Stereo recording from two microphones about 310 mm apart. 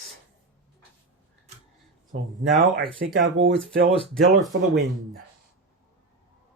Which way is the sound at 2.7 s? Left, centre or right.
Right.